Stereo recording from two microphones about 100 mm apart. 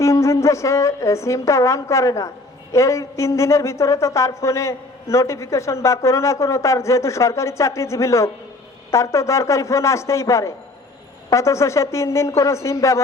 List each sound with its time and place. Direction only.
0.0 s a woman's voice: 30° left (ahead or behind)